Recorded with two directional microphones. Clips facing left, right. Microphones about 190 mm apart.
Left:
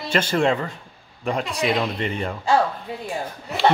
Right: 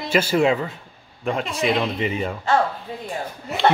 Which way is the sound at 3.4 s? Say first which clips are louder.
Even; 5° right (ahead or behind).